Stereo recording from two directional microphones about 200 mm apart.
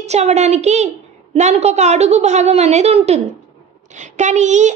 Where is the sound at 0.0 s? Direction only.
35° right (ahead or behind).